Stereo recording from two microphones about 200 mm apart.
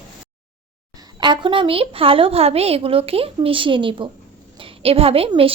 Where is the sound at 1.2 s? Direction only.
25° right (ahead or behind).